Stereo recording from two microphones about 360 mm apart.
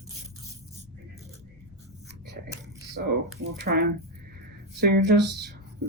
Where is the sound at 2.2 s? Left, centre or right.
Right.